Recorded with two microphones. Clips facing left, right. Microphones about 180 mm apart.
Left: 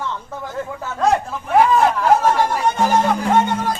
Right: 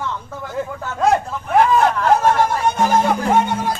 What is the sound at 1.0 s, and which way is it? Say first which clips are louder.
A man's voice: right 1 dB; 5° right (ahead or behind).